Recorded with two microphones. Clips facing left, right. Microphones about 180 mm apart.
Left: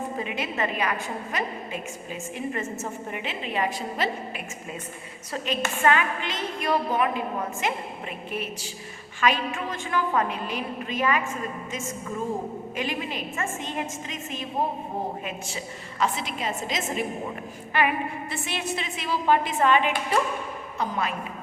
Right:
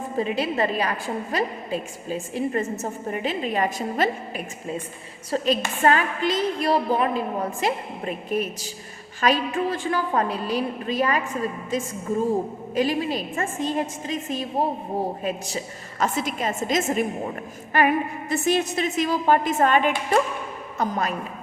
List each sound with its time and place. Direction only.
0.2 s a woman's voice: 35° right (ahead or behind)